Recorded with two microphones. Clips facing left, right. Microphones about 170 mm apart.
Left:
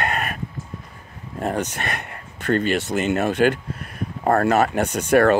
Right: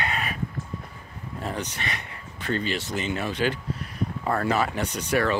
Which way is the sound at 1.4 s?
50° left (ahead or behind).